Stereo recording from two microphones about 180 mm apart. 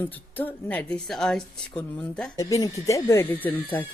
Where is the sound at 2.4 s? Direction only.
20° left (ahead or behind).